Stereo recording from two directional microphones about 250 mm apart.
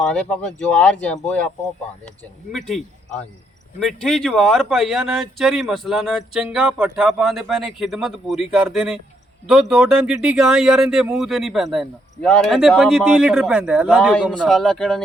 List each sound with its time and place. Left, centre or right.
0.0 s speech: centre